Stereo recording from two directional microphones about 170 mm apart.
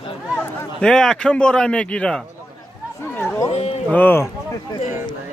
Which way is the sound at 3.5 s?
35° left (ahead or behind).